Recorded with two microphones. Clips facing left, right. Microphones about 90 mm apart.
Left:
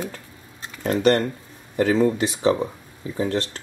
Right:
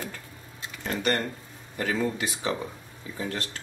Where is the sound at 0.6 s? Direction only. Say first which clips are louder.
Left 8 dB; 35° left (ahead or behind).